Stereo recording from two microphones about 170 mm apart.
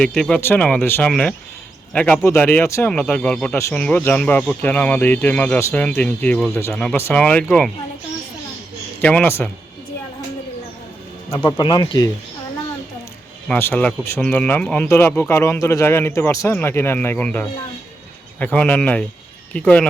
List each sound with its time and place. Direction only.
0.0 s speech: 5° left (ahead or behind)
9.0 s speech: 10° left (ahead or behind)
11.3 s speech: 10° left (ahead or behind)
11.5 s speech: 25° left (ahead or behind)
13.5 s speech: 10° left (ahead or behind)